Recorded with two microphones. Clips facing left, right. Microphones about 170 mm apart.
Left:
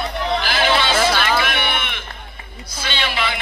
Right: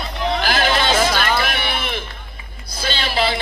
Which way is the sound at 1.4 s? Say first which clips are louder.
Even; 35° right (ahead or behind).